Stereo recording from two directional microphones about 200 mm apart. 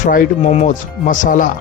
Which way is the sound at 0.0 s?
35° left (ahead or behind).